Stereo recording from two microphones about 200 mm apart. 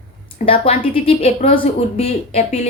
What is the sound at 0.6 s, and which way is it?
A woman's voice, 30° left (ahead or behind).